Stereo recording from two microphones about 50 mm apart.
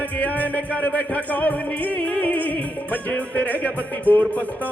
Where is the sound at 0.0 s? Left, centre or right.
Left.